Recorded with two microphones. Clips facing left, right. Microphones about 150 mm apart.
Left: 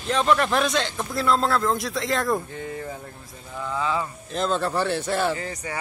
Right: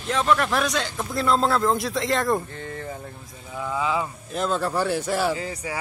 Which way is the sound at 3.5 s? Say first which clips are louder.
Right 1 dB; 10° right (ahead or behind).